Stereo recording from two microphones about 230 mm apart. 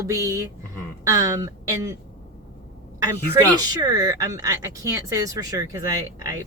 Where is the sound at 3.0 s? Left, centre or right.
Centre.